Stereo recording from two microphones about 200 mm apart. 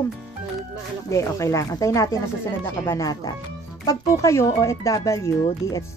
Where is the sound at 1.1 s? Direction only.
15° left (ahead or behind).